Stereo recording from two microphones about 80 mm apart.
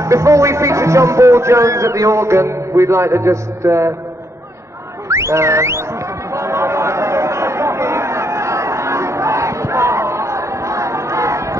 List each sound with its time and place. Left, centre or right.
0.0 s speech: right
5.0 s a sound: right
6.3 s chatter: right